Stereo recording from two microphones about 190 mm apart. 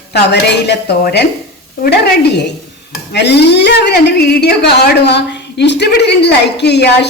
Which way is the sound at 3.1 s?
60° left (ahead or behind).